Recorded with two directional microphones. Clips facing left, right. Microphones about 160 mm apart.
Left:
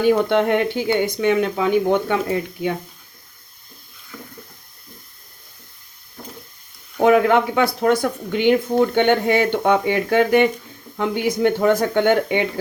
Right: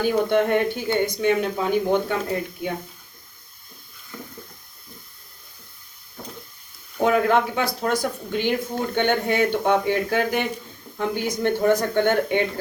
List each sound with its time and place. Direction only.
0.0 s speech: 65° left (ahead or behind)
7.0 s speech: 70° left (ahead or behind)